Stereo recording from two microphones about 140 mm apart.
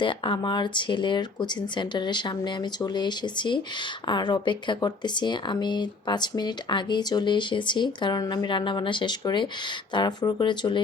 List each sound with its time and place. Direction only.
0.0 s speech: 35° left (ahead or behind)